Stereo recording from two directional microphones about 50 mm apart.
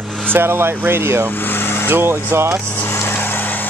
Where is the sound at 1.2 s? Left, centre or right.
Left.